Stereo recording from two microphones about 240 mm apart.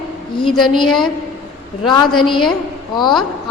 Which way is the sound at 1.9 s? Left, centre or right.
Centre.